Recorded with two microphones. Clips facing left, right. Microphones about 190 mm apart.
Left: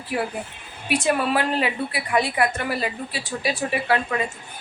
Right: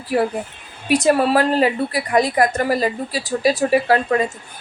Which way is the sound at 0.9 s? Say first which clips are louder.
Right 6 dB; 40° right (ahead or behind).